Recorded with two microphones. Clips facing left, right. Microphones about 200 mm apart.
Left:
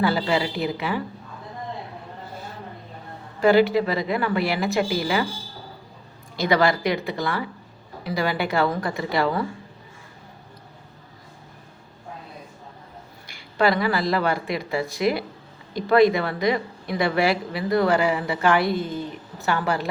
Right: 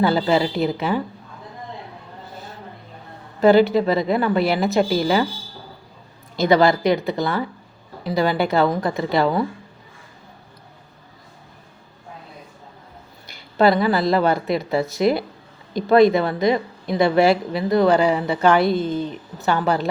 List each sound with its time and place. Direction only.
0.0 s a woman's voice: 25° right (ahead or behind)
3.4 s a woman's voice: 25° right (ahead or behind)
6.4 s a woman's voice: 25° right (ahead or behind)
13.6 s a woman's voice: 25° right (ahead or behind)